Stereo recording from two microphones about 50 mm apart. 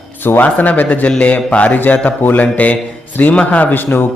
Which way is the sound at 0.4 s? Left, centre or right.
Left.